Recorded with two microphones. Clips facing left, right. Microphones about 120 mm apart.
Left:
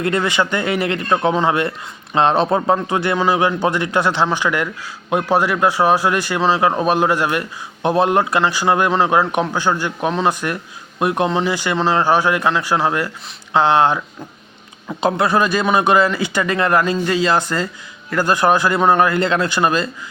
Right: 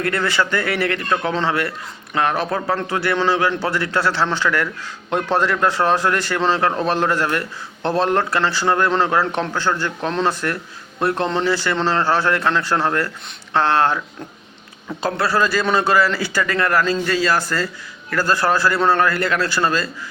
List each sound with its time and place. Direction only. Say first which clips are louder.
0.0 s a man's voice: left 2 dB; 20° left (ahead or behind)